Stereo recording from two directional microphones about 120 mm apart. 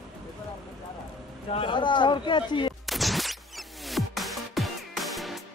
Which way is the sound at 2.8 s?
Centre (ahead or behind).